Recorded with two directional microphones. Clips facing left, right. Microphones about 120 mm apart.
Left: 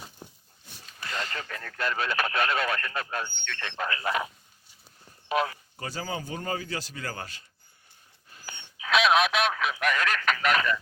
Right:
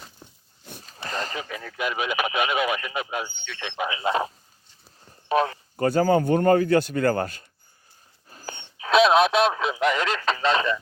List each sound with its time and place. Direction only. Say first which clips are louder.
0.9 s a sound: right 4 dB; 35° right (ahead or behind)
1.3 s speech: right 4 dB; 10° right (ahead or behind)
5.3 s speech: right 5 dB; 35° right (ahead or behind)
5.7 s speech: right 15 dB; 55° right (ahead or behind)
8.3 s speech: right 7 dB; 35° right (ahead or behind)